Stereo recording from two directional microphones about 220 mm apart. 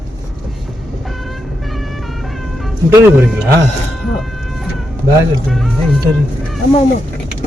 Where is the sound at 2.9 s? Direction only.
10° right (ahead or behind).